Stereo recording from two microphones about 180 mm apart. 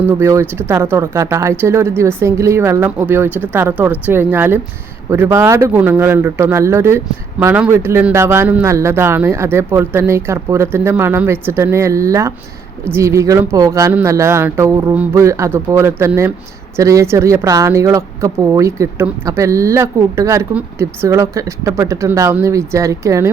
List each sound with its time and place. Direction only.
0.0 s speech: 10° right (ahead or behind)